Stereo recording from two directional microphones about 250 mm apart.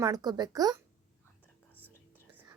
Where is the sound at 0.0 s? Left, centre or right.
Centre.